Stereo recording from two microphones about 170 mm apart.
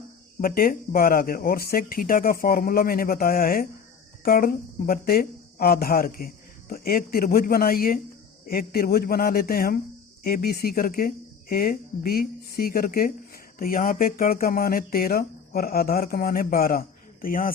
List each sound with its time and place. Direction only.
0.4 s speech: 55° left (ahead or behind)